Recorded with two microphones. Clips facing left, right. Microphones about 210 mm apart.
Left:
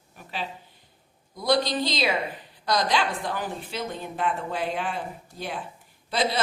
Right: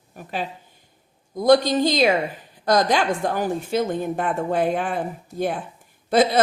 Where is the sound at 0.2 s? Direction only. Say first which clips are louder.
Right 5 dB; 45° right (ahead or behind).